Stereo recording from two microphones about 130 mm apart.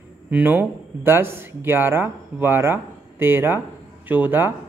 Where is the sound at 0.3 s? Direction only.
15° right (ahead or behind).